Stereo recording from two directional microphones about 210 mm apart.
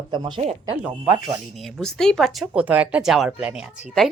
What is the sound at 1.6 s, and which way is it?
Speech, centre (ahead or behind).